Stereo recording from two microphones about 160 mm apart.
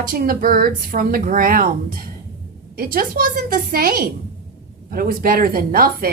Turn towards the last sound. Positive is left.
turn(degrees=-65)  # may be behind; listen again after turning